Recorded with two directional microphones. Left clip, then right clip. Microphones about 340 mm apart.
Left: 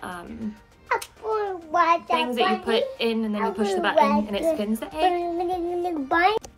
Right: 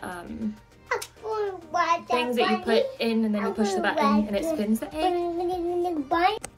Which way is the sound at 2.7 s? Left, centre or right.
Centre.